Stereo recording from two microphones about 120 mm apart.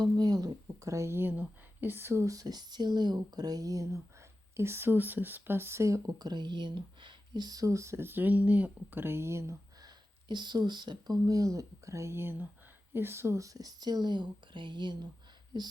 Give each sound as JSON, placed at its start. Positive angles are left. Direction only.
{"t": 0.0, "sound": "speech", "side_deg": -35}
{"t": 10.2, "sound": "speech", "side_deg": -40}